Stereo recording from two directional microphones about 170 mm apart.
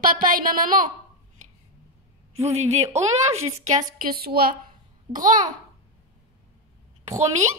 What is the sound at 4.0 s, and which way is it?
Speech, 60° right (ahead or behind).